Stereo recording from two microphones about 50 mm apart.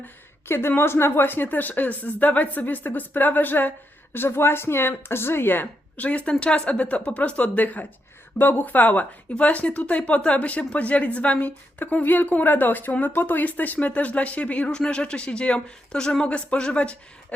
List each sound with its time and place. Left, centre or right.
0.4 s speech: left
6.0 s a woman's voice: left